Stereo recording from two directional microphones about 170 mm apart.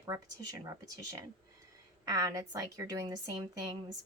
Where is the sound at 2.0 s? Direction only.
20° right (ahead or behind).